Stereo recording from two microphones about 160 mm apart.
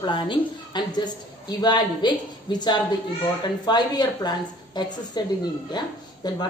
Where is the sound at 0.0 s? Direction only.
30° left (ahead or behind).